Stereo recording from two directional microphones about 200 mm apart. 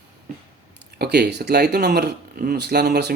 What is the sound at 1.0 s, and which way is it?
Speech, 55° right (ahead or behind).